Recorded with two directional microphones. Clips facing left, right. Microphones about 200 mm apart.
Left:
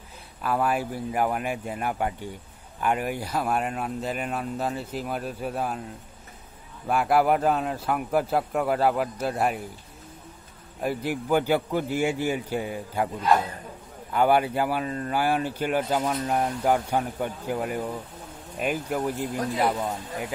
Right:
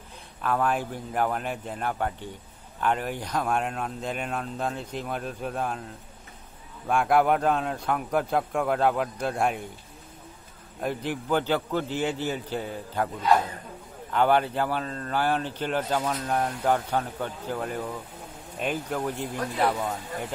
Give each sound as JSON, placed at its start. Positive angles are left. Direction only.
{"t": 0.4, "sound": "speech", "side_deg": 5}
{"t": 6.9, "sound": "speech", "side_deg": 5}
{"t": 10.8, "sound": "speech", "side_deg": 5}